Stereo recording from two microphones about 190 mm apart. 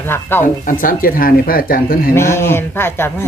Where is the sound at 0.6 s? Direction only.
45° left (ahead or behind).